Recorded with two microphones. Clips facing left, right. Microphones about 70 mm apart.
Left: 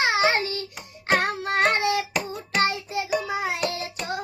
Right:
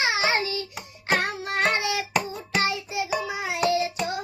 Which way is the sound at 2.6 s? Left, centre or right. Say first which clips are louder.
Left 3 dB; left.